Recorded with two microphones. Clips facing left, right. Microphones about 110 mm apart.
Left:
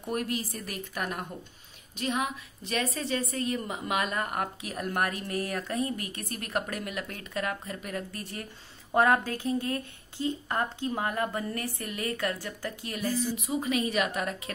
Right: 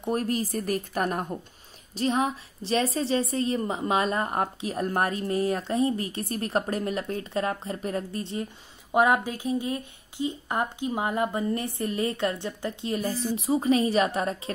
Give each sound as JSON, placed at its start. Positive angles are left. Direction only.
{"t": 0.0, "sound": "a woman's voice", "side_deg": -35}